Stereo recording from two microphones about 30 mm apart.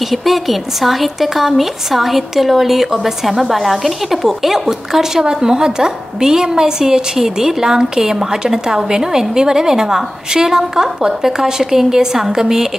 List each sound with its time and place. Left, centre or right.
0.1 s a woman's voice: centre
5.2 s a woman's voice: right